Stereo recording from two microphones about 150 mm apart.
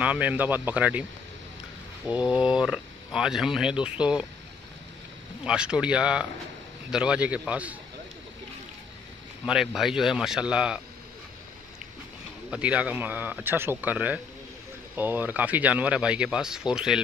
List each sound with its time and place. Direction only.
0.0 s speech: 10° right (ahead or behind)
2.0 s speech: 10° right (ahead or behind)
5.4 s speech: 5° right (ahead or behind)
9.5 s speech: 5° right (ahead or behind)
12.4 s speech: 10° right (ahead or behind)